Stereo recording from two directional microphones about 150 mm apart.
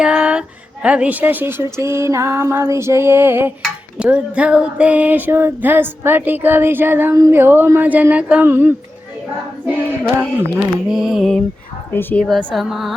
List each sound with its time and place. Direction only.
0.0 s music: 5° right (ahead or behind)
11.9 s speech: 15° left (ahead or behind)
12.2 s music: centre (ahead or behind)